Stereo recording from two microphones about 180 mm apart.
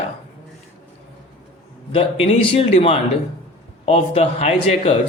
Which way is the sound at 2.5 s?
30° left (ahead or behind).